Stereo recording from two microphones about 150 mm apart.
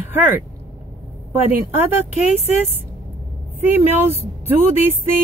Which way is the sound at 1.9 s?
45° left (ahead or behind).